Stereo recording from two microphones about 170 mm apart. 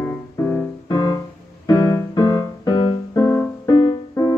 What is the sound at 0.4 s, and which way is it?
Music, 15° left (ahead or behind).